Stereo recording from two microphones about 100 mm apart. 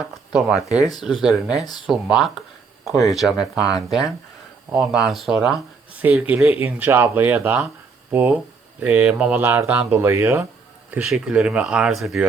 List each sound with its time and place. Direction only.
0.3 s speech: 5° right (ahead or behind)
6.0 s speech: 15° right (ahead or behind)
9.4 s speech: 20° right (ahead or behind)
11.0 s speech: 5° right (ahead or behind)